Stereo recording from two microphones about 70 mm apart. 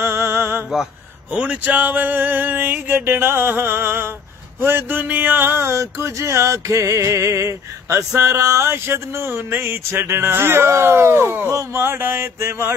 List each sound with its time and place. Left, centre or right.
0.0 s music: right
1.3 s a sound: centre; by 4.1 s right
4.6 s music: right